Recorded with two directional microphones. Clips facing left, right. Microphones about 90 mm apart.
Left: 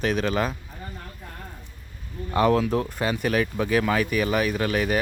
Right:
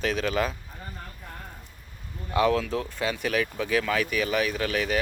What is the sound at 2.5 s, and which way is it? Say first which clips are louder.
Speech: left 4 dB; 20° left (ahead or behind).